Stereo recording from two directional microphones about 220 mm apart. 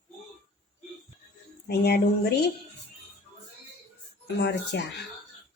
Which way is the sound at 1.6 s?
50° left (ahead or behind).